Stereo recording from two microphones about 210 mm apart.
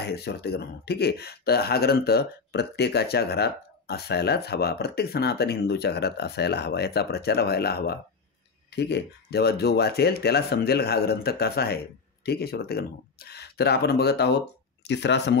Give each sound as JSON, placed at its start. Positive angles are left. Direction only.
{"t": 0.0, "sound": "speech", "side_deg": 50}